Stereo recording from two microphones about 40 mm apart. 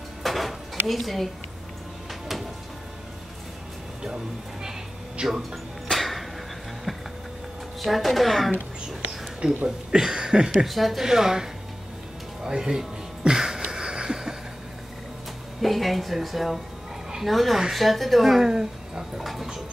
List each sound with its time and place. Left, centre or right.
0.2 s a sound: centre
5.4 s music: centre
7.8 s speech: centre
9.4 s a woman's voice: centre
9.8 s a sound: centre
10.6 s speech: centre
11.1 s a woman's voice: centre
12.4 s a sound: centre
15.6 s a woman's voice: centre